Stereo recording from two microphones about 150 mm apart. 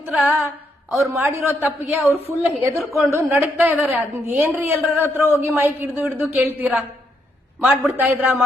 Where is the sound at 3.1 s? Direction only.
20° right (ahead or behind).